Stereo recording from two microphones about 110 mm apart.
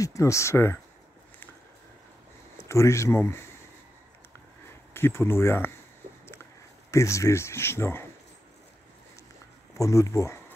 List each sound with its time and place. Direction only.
0.0 s speech: 30° left (ahead or behind)
2.5 s speech: 25° left (ahead or behind)
4.9 s speech: 20° left (ahead or behind)
6.9 s speech: 25° left (ahead or behind)
9.8 s speech: 30° left (ahead or behind)